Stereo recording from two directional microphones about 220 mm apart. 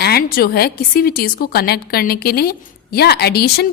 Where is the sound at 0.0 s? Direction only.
45° left (ahead or behind).